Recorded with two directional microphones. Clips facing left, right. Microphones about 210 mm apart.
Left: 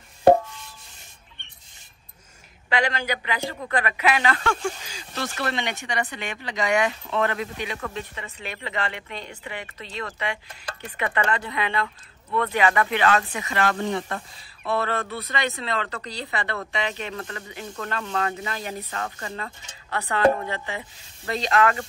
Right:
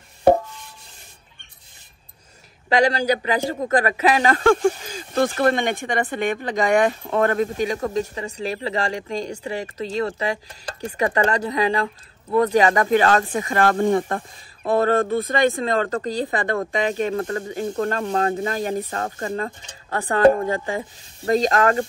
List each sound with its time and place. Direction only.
2.7 s speech: 40° right (ahead or behind)